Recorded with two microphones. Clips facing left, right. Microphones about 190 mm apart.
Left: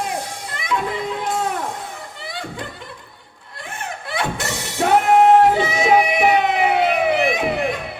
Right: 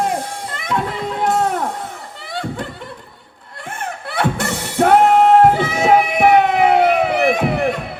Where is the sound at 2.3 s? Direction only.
55° right (ahead or behind).